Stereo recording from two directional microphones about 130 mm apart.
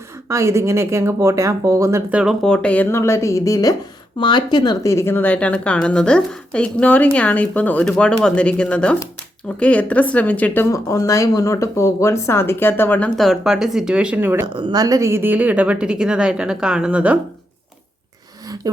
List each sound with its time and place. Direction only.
0.3 s speech: 20° right (ahead or behind)
2.1 s speech: 5° right (ahead or behind)
2.5 s speech: 10° left (ahead or behind)
2.9 s a woman's voice: 20° left (ahead or behind)
4.2 s speech: 35° left (ahead or behind); by 13.1 s 15° left (ahead or behind)
13.1 s speech: centre (ahead or behind); by 14.4 s 15° right (ahead or behind)
14.4 s a woman's voice: 35° right (ahead or behind); by 17.2 s 10° right (ahead or behind)